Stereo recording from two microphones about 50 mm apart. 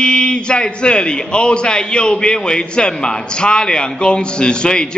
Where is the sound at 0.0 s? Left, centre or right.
Centre.